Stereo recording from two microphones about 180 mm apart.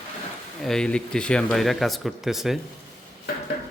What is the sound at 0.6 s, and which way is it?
Speech, 5° left (ahead or behind).